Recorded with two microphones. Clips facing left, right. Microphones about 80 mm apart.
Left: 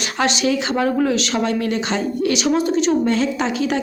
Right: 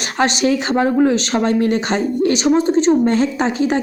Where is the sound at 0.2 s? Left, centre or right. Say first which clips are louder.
Right 3 dB; right.